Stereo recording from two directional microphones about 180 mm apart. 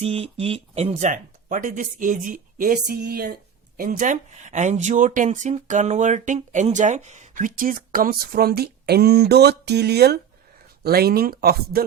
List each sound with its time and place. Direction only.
0.0 s speech: 35° right (ahead or behind); by 11.9 s 55° right (ahead or behind)